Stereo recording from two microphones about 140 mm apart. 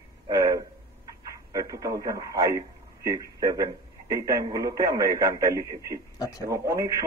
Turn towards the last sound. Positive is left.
turn(degrees=-20)  # may be behind; listen again after turning